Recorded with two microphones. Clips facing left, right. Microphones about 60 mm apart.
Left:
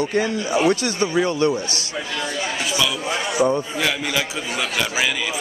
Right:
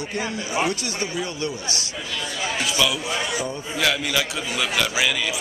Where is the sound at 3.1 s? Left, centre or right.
Left.